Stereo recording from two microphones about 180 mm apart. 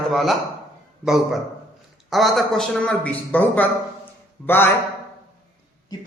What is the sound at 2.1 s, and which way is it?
A man's voice, centre (ahead or behind).